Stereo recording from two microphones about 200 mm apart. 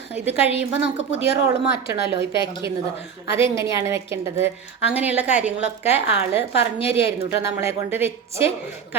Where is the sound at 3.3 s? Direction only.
15° right (ahead or behind).